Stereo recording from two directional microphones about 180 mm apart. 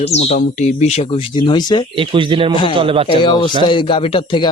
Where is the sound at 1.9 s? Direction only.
30° right (ahead or behind).